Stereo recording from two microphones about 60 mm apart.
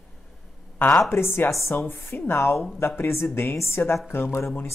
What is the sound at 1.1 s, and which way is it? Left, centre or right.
Speech, left.